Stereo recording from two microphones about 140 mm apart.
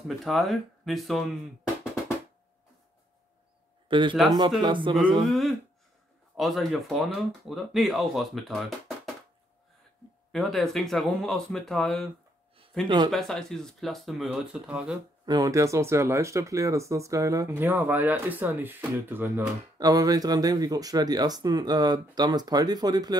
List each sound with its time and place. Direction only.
0.1 s speech: centre (ahead or behind)
3.9 s speech: 35° right (ahead or behind)
5.2 s speech: centre (ahead or behind)
10.3 s speech: centre (ahead or behind)
12.8 s speech: 35° right (ahead or behind)
13.1 s speech: 5° left (ahead or behind)
15.2 s speech: 25° right (ahead or behind)